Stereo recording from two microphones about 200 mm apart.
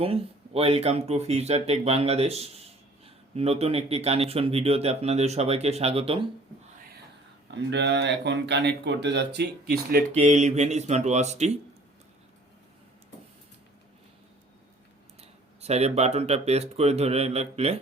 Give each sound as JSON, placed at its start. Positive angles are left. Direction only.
{"t": 0.0, "sound": "speech", "side_deg": -30}
{"t": 7.4, "sound": "speech", "side_deg": -60}
{"t": 10.1, "sound": "speech", "side_deg": -35}
{"t": 15.2, "sound": "speech", "side_deg": -30}